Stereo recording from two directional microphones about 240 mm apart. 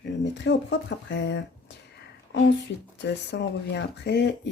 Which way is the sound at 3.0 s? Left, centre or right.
Left.